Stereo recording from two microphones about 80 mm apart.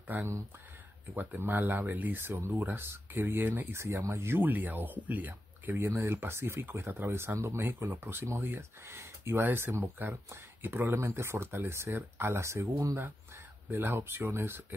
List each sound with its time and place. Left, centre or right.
0.0 s speech: right